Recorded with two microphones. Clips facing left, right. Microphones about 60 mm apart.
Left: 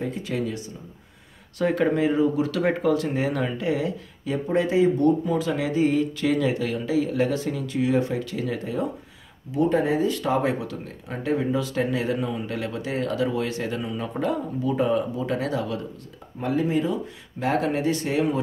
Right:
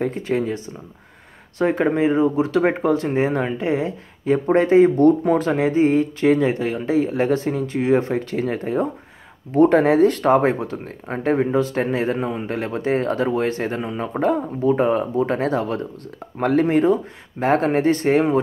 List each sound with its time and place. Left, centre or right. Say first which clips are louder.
0.0 s speech: right 6 dB; right
1.6 s speech: right 3 dB; right
9.5 s speech: right 7 dB; right
16.3 s speech: right 7 dB; right